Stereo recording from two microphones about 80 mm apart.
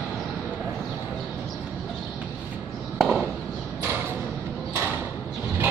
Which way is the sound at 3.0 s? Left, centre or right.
Centre.